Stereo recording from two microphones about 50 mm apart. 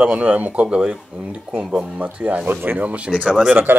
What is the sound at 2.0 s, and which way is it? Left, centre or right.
Speech, right.